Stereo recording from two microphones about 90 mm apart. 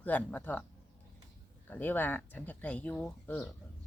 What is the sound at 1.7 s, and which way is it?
Speech, 20° left (ahead or behind).